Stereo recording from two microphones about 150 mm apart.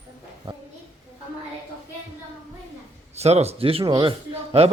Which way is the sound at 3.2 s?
45° right (ahead or behind).